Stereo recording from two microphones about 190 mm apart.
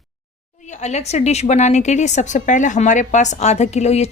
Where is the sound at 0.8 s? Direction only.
35° left (ahead or behind).